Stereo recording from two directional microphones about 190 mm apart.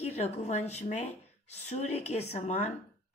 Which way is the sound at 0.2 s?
35° left (ahead or behind).